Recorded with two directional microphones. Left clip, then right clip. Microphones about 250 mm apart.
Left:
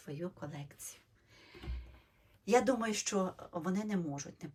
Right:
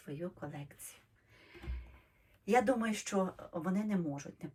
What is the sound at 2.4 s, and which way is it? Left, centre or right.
Speech, centre.